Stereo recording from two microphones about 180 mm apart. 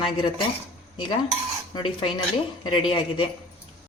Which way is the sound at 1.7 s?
30° left (ahead or behind).